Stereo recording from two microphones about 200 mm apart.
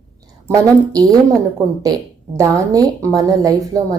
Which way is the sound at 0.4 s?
15° right (ahead or behind).